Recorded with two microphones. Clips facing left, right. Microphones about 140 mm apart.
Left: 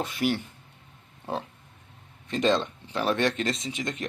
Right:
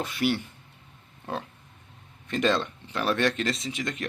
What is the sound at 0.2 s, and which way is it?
Speech, 5° right (ahead or behind).